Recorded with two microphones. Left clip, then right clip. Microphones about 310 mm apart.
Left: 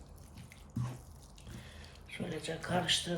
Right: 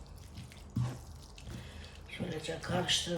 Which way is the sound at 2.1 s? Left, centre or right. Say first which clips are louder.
Right 1 dB; centre.